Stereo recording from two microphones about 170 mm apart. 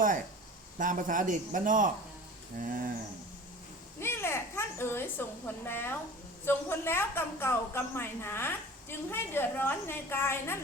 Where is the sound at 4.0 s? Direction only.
15° left (ahead or behind).